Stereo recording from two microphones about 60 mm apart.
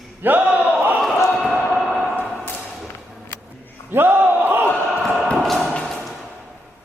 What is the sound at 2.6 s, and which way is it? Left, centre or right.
Thump, centre.